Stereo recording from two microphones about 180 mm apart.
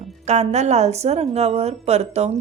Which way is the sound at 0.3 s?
40° right (ahead or behind).